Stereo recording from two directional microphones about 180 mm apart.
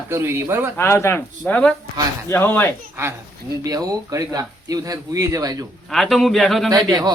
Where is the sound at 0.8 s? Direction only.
15° left (ahead or behind).